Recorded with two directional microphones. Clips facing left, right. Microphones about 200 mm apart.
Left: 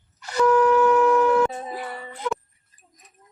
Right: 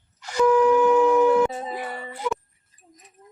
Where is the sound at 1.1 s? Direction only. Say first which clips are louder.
Right 1 dB; 20° right (ahead or behind).